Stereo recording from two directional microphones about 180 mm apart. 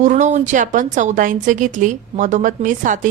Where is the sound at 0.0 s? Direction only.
40° right (ahead or behind).